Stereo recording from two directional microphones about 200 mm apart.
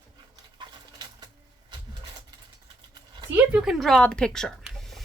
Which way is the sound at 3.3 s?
5° right (ahead or behind).